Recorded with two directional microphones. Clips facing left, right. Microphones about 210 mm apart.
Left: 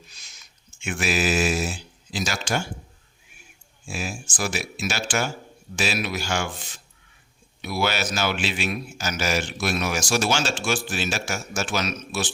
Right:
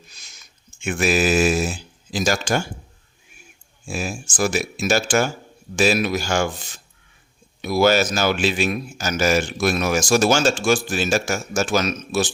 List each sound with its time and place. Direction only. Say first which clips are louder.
0.8 s a man's voice: right 5 dB; 45° right (ahead or behind)
3.8 s a man's voice: right 4 dB; 45° right (ahead or behind)
7.6 s a man's voice: right 9 dB; 40° right (ahead or behind)